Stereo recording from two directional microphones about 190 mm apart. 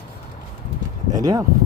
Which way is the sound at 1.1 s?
20° right (ahead or behind).